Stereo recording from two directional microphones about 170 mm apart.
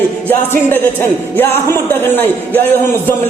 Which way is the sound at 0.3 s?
10° left (ahead or behind).